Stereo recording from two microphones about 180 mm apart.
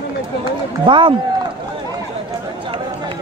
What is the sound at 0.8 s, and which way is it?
Speech, 25° right (ahead or behind).